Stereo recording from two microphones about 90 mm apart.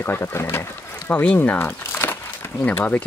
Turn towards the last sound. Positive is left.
turn(degrees=15)  # may be behind; listen again after turning